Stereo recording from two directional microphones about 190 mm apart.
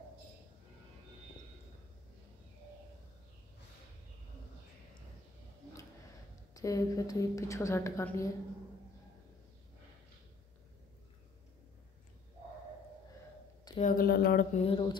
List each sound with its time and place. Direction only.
6.5 s a woman's voice: 15° left (ahead or behind)
13.7 s speech: 45° left (ahead or behind)
14.5 s speech: 30° left (ahead or behind)